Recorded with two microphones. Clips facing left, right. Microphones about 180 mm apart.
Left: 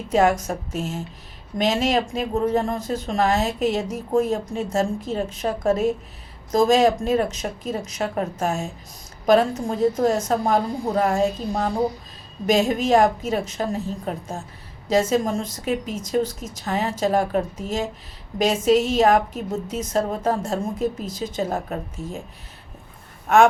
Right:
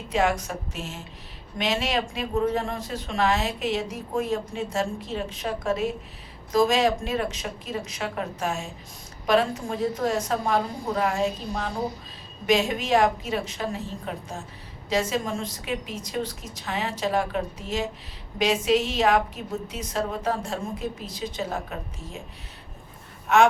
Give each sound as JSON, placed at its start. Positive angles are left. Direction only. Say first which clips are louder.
{"t": 0.1, "sound": "speech", "louder": "left 5 dB", "side_deg": 45}
{"t": 23.3, "sound": "speech", "louder": "left 3 dB", "side_deg": 50}